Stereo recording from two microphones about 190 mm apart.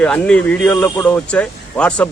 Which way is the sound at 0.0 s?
5° left (ahead or behind).